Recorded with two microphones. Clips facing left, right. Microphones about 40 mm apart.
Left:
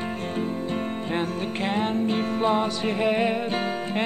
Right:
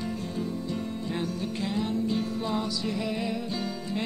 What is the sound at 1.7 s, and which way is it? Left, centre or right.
Music, left.